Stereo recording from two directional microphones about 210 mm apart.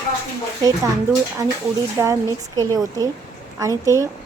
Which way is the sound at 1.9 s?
15° right (ahead or behind).